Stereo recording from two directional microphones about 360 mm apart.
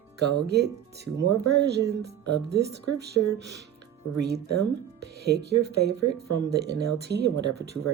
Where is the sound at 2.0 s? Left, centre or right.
Right.